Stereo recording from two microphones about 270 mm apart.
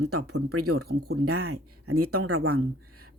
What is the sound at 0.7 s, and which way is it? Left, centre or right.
Speech, right.